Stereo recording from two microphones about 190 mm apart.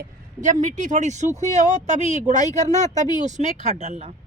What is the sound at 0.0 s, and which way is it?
A woman's voice, 40° right (ahead or behind).